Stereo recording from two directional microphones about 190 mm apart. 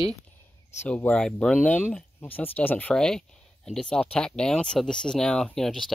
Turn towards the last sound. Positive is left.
turn(degrees=0)  # may be behind; listen again after turning